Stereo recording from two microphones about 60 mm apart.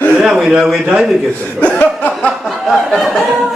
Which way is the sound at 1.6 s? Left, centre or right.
Left.